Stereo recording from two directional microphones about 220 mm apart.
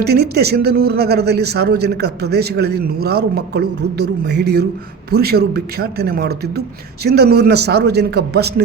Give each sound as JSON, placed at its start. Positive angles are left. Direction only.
{"t": 0.0, "sound": "speech", "side_deg": -45}